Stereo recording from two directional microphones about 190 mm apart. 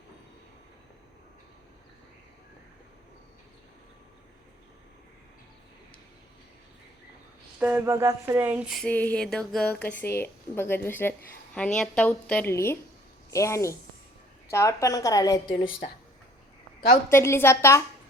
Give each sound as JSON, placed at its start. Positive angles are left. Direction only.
{"t": 7.6, "sound": "a sound", "side_deg": -10}
{"t": 11.5, "sound": "a woman's voice", "side_deg": 5}
{"t": 17.1, "sound": "speech", "side_deg": 15}